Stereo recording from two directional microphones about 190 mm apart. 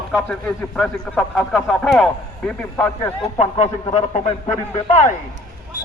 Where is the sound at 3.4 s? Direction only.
35° left (ahead or behind).